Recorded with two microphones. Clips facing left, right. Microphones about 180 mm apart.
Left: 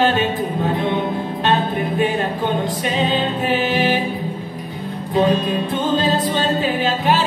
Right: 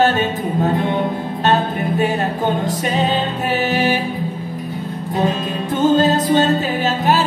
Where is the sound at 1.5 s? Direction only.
45° right (ahead or behind).